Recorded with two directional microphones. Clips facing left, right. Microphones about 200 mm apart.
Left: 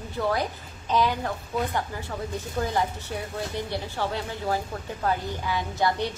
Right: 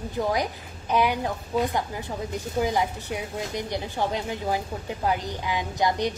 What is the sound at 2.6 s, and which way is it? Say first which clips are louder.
A woman's voice: right 2 dB; 15° right (ahead or behind).